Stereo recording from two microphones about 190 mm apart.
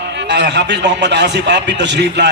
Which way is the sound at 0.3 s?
65° right (ahead or behind).